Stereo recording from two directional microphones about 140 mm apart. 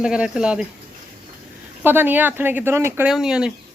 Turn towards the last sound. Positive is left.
turn(degrees=-5)  # may be behind; listen again after turning